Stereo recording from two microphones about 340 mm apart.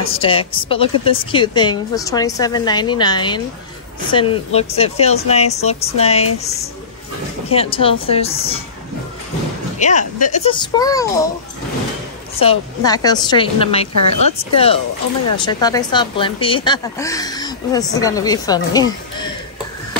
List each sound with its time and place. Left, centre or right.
0.1 s speech: centre
7.5 s speech: centre
9.8 s speech: left
12.4 s speech: centre